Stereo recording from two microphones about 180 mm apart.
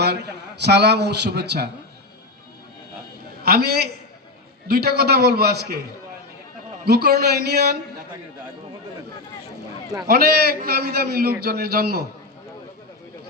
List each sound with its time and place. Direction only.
0.6 s a man's voice: 65° right (ahead or behind)
3.4 s a man's voice: 60° right (ahead or behind)
6.8 s a man's voice: 60° right (ahead or behind)
10.1 s a man's voice: 60° right (ahead or behind)